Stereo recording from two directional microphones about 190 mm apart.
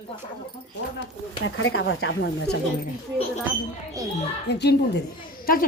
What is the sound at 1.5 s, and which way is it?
Speech, 90° left.